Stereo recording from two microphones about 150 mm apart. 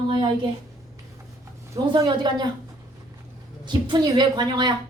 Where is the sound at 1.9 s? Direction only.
30° right (ahead or behind).